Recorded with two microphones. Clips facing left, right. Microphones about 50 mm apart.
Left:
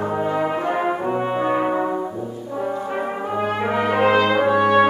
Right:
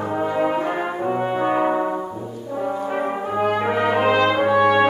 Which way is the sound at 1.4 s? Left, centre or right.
Centre.